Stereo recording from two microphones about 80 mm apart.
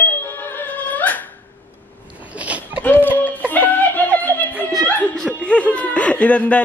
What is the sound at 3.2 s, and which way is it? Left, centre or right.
Music, left.